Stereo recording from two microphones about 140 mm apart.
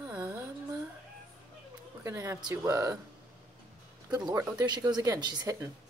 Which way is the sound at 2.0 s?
20° right (ahead or behind).